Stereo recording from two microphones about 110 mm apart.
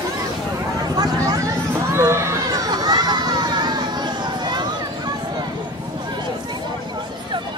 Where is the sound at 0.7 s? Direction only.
35° right (ahead or behind).